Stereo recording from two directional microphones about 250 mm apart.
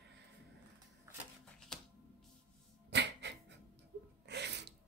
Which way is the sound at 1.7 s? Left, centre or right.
Centre.